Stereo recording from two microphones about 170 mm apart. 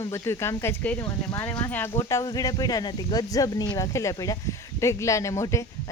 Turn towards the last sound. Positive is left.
turn(degrees=15)  # may be behind; listen again after turning